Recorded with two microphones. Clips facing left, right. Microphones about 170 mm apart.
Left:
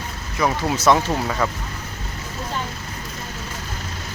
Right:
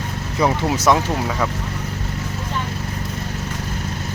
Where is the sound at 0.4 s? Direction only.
15° right (ahead or behind).